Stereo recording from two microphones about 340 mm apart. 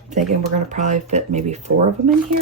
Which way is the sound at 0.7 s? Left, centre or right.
Right.